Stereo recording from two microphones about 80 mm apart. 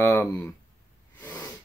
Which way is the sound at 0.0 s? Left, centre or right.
Left.